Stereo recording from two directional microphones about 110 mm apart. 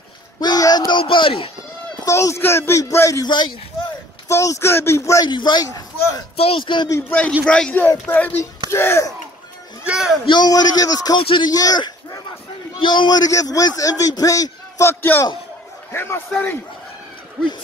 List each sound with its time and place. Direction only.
0.4 s a sound: 35° left (ahead or behind); by 1.5 s 50° left (ahead or behind)
2.0 s speech: 25° left (ahead or behind)
3.3 s speech: 45° left (ahead or behind)
4.3 s speech: 25° left (ahead or behind)
5.2 s a man's voice: 40° left (ahead or behind)
6.3 s speech: 60° left (ahead or behind)
6.9 s a man's voice: 15° left (ahead or behind)
9.8 s speech: 5° right (ahead or behind)
10.2 s a man's voice: 40° left (ahead or behind)
11.1 s speech: 50° left (ahead or behind)
11.5 s a man's voice: 35° left (ahead or behind); by 16.2 s 20° left (ahead or behind)